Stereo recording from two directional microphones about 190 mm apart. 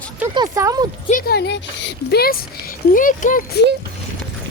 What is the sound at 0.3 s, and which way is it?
Speech, 15° right (ahead or behind).